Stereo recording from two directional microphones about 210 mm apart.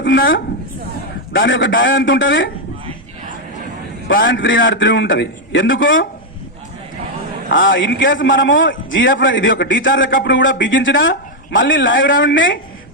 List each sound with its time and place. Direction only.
0.0 s a woman's voice: 60° left (ahead or behind)
4.1 s a man's voice: 60° left (ahead or behind)
7.5 s a man's voice: 65° left (ahead or behind)